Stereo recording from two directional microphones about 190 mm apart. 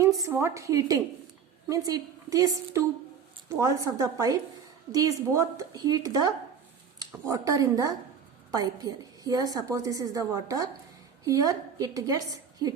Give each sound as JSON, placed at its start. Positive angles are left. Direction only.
{"t": 0.2, "sound": "a woman's voice", "side_deg": -15}